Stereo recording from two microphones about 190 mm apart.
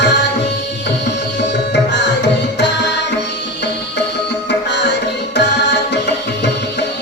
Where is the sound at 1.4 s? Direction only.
65° left (ahead or behind).